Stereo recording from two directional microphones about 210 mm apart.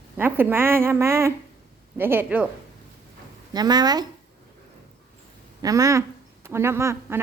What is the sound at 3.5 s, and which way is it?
Speech, 20° right (ahead or behind).